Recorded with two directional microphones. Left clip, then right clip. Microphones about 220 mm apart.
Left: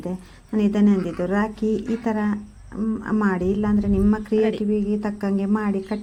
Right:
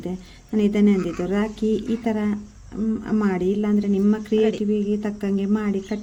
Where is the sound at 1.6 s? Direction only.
30° left (ahead or behind).